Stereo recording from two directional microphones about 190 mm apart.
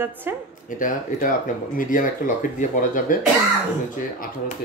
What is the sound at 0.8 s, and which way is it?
Speech, 45° left (ahead or behind).